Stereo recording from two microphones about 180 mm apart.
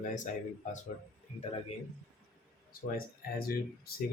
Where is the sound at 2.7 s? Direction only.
55° left (ahead or behind).